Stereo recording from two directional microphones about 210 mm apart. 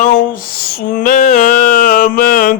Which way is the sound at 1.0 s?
40° left (ahead or behind).